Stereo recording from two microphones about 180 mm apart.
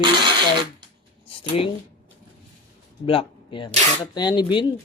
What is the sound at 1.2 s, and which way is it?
Speech, 30° left (ahead or behind).